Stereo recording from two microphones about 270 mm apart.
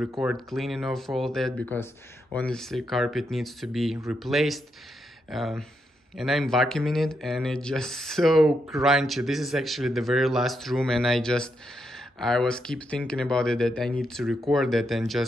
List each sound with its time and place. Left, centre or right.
0.2 s speech: centre